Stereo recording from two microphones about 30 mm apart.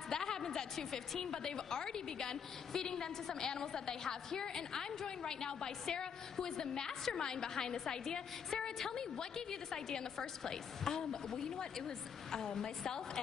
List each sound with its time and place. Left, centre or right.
0.1 s a woman's voice: left